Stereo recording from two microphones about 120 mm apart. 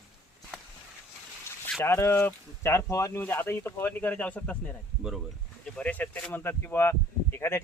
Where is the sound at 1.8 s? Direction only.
20° left (ahead or behind).